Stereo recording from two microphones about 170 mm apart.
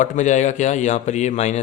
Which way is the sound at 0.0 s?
45° left (ahead or behind).